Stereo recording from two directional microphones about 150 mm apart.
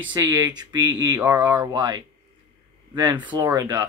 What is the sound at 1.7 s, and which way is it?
Speech, 25° right (ahead or behind).